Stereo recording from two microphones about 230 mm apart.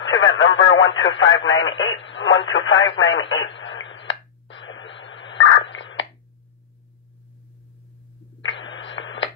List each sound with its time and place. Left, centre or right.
0.0 s radio: left
8.4 s radio: left